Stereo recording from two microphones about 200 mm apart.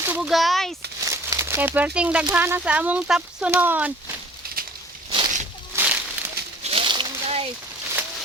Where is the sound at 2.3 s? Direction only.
10° right (ahead or behind).